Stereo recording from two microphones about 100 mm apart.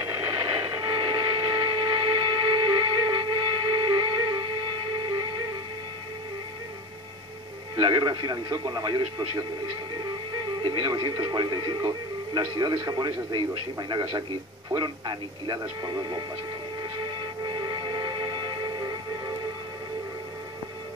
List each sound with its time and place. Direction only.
0.1 s train: 50° right (ahead or behind)
5.0 s music: 50° right (ahead or behind)
7.7 s speech: 50° right (ahead or behind)
10.6 s speech: 45° right (ahead or behind)
17.5 s train: 50° right (ahead or behind)